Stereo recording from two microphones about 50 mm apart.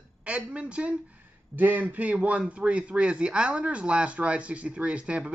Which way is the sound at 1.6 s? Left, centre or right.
Right.